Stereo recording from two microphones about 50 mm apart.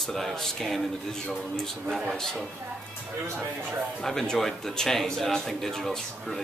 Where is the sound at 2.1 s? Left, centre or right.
Centre.